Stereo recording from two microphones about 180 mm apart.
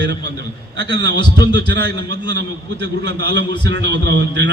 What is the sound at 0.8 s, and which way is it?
Speech, 25° left (ahead or behind).